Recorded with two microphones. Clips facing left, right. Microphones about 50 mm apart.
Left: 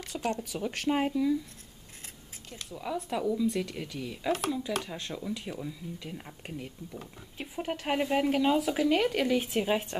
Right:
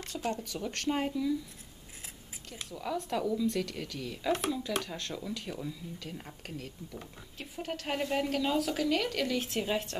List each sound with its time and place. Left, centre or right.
0.0 s speech: centre
2.7 s speech: centre
4.3 s speech: centre
4.8 s speech: centre